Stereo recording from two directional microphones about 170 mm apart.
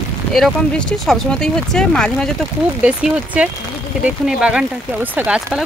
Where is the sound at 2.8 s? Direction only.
5° right (ahead or behind).